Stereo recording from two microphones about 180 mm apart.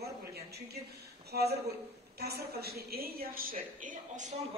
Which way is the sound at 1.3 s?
65° right (ahead or behind).